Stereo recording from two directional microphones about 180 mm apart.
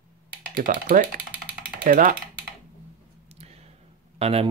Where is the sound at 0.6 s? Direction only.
50° right (ahead or behind).